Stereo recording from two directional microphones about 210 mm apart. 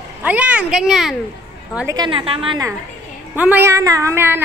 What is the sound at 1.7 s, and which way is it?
A woman's voice, 15° right (ahead or behind).